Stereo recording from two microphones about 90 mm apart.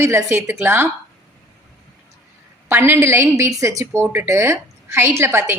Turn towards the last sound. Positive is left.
turn(degrees=-25)  # may be behind; listen again after turning